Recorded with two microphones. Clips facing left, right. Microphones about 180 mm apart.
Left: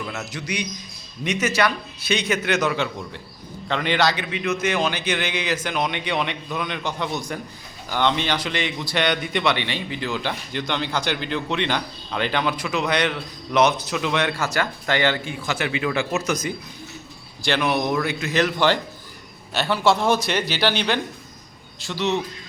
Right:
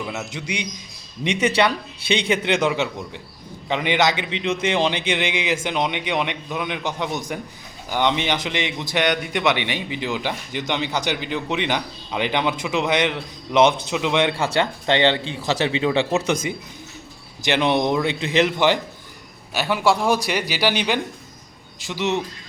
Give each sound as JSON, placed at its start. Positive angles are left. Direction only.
{"t": 0.0, "sound": "speech", "side_deg": -10}
{"t": 1.4, "sound": "a man's voice", "side_deg": -30}
{"t": 15.4, "sound": "a man's voice", "side_deg": -35}
{"t": 19.5, "sound": "speech", "side_deg": -10}